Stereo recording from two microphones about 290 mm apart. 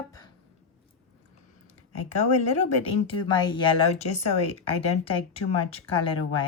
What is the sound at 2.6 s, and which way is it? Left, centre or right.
Speech, centre.